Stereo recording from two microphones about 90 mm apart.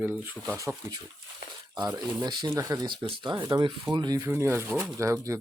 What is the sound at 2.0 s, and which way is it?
Speech, 50° right (ahead or behind).